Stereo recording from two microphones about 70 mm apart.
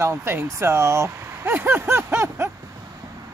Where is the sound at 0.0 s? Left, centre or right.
Right.